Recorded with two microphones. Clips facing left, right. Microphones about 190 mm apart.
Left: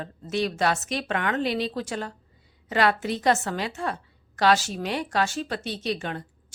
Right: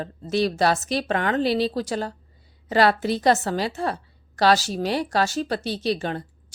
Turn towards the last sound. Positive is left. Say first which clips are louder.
# right 4 dB
turn(degrees=-35)  # may be behind; listen again after turning